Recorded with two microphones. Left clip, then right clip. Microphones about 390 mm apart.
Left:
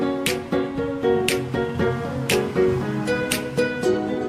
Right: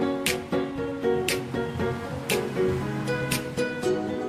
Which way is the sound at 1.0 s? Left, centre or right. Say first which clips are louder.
Left 5 dB; left.